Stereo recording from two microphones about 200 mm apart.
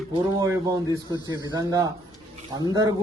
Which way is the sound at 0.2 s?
15° right (ahead or behind).